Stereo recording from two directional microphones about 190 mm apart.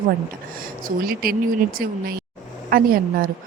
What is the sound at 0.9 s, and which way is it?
Speech, 50° right (ahead or behind).